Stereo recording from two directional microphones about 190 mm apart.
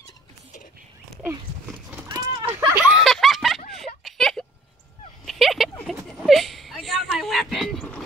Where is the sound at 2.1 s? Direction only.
20° right (ahead or behind).